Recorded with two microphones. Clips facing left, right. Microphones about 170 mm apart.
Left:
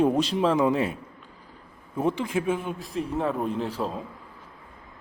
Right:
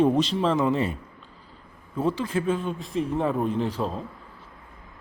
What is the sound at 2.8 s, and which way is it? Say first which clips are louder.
A man's voice: right 2 dB; centre (ahead or behind).